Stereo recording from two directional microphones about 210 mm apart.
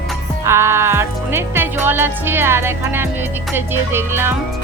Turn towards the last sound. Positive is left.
turn(degrees=-10)  # may be behind; listen again after turning